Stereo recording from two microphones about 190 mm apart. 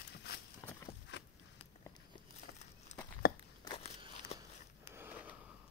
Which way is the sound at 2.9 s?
40° left (ahead or behind).